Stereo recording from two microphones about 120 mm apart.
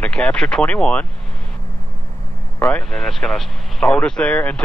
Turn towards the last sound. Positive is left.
turn(degrees=10)  # may be behind; listen again after turning